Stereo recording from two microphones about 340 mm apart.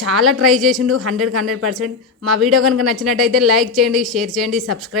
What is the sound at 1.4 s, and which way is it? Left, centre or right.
Speech, right.